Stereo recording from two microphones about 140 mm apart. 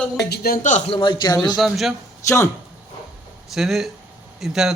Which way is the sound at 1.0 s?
30° left (ahead or behind).